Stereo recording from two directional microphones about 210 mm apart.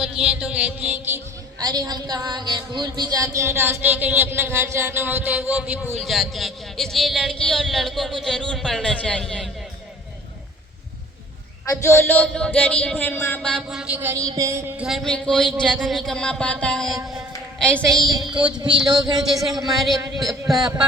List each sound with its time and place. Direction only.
0.0 s a woman's voice: 5° right (ahead or behind)
11.7 s speech: 15° left (ahead or behind); by 14.8 s 15° right (ahead or behind)
14.8 s speech: centre (ahead or behind)
17.3 s a sound: 5° left (ahead or behind)
17.9 s a woman's voice: 20° right (ahead or behind)
19.2 s speech: centre (ahead or behind)